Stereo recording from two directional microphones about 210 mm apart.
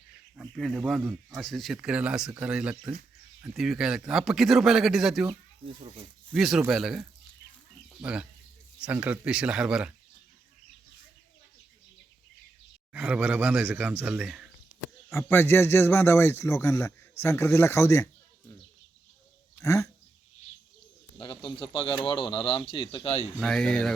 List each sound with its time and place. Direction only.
0.3 s speech: centre (ahead or behind)
5.6 s a child's voice: 25° right (ahead or behind)
6.3 s speech: centre (ahead or behind)
12.9 s a man's voice: 5° right (ahead or behind)
15.1 s a man's voice: 10° left (ahead or behind)
19.5 s speech: 15° left (ahead or behind)
21.2 s speech: 25° left (ahead or behind)
23.3 s speech: 5° left (ahead or behind)